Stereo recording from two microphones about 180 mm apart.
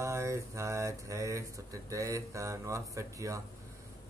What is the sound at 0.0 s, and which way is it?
Speech, 15° right (ahead or behind).